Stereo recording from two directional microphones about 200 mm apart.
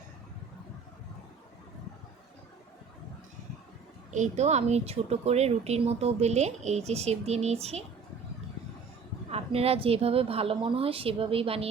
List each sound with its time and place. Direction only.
4.1 s a woman's voice: 35° right (ahead or behind)
9.3 s a woman's voice: 30° right (ahead or behind)